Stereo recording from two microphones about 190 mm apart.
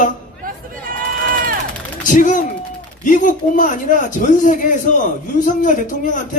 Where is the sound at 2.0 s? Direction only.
45° left (ahead or behind).